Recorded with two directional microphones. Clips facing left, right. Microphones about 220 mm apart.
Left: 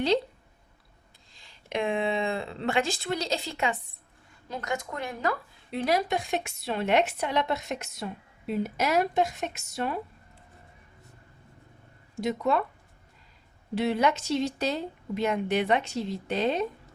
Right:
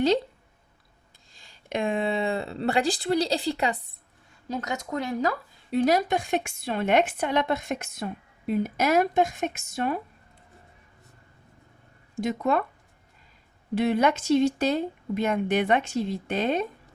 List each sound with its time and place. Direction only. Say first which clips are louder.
1.3 s speech: right 2 dB; 45° right (ahead or behind)
12.2 s speech: right 1 dB; 50° right (ahead or behind)
13.7 s speech: right 3 dB; 50° right (ahead or behind)